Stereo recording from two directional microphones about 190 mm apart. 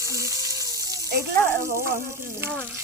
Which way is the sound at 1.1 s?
55° right (ahead or behind).